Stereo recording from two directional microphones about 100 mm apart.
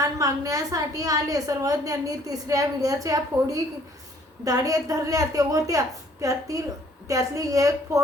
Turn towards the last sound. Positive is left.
turn(degrees=-35)  # may be behind; listen again after turning